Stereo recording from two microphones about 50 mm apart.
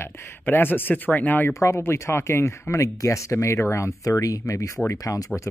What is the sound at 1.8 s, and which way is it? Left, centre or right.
Speech, left.